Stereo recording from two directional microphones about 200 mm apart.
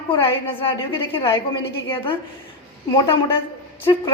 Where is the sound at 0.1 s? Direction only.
25° left (ahead or behind).